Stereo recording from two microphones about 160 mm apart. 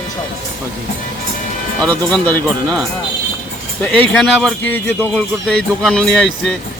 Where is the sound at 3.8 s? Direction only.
10° left (ahead or behind).